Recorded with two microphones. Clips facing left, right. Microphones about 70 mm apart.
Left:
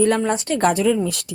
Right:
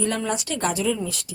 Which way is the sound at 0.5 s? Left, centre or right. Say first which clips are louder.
Left 8 dB; left.